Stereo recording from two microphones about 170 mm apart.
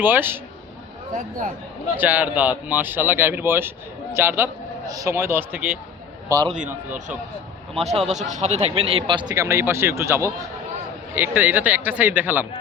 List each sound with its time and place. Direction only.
0.0 s speech: 10° right (ahead or behind)
1.1 s a man's voice: 50° right (ahead or behind)
2.0 s speech: 10° right (ahead or behind)
6.2 s a man's voice: 20° right (ahead or behind)
7.9 s a man's voice: 40° right (ahead or behind); by 12.5 s 10° right (ahead or behind)